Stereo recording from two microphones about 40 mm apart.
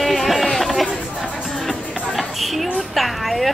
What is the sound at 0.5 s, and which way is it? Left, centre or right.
Chatter, centre.